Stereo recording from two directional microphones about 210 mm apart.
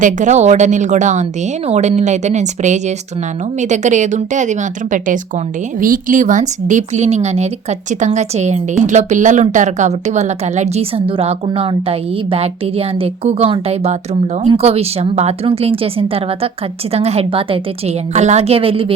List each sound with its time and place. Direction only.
0.0 s a woman's voice: 35° right (ahead or behind)